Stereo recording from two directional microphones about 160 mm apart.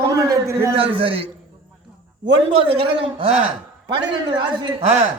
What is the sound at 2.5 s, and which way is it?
Speech, 35° right (ahead or behind).